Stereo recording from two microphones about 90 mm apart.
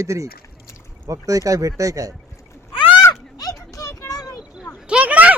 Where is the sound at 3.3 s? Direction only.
40° left (ahead or behind).